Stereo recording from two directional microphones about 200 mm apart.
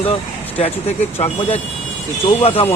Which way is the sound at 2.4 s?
30° left (ahead or behind).